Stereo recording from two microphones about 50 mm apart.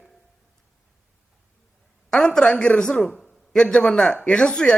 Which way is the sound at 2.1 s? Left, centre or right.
Centre.